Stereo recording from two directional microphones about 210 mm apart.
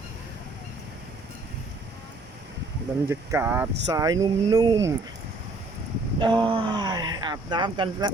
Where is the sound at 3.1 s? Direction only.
10° right (ahead or behind).